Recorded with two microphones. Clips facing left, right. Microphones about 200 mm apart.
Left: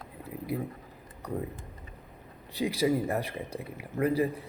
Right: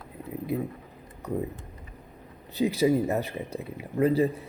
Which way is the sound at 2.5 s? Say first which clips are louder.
Right 4 dB; 25° right (ahead or behind).